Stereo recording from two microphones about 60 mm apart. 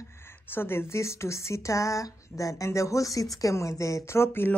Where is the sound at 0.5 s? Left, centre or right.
Left.